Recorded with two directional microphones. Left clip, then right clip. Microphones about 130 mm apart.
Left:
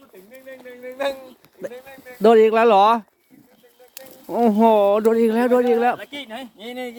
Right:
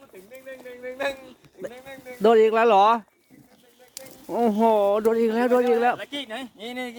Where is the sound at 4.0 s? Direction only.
30° left (ahead or behind).